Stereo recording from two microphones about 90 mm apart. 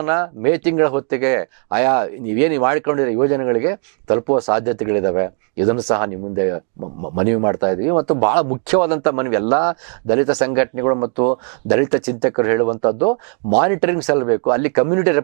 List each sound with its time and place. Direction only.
0.0 s speech: 15° right (ahead or behind)